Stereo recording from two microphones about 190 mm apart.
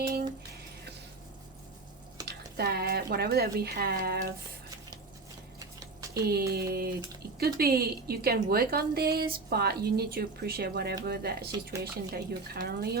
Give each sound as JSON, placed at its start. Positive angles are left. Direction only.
{"t": 2.2, "sound": "speech", "side_deg": -55}
{"t": 5.8, "sound": "a sound", "side_deg": -15}
{"t": 6.2, "sound": "a woman's voice", "side_deg": -55}